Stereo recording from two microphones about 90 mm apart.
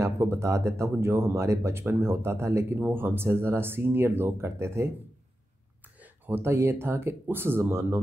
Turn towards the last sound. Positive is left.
turn(degrees=-30)  # may be behind; listen again after turning